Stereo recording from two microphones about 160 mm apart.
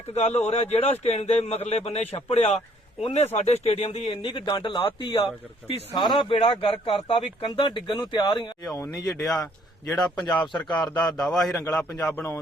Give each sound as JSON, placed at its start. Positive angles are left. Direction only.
{"t": 0.1, "sound": "a man's voice", "side_deg": 40}
{"t": 10.5, "sound": "a man's voice", "side_deg": 5}
{"t": 11.6, "sound": "speech", "side_deg": 15}